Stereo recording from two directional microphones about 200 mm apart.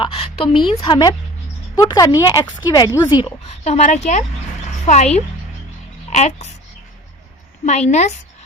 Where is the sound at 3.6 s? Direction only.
35° left (ahead or behind).